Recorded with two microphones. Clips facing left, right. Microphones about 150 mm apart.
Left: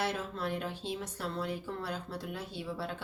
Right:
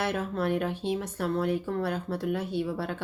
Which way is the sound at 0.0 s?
60° right (ahead or behind).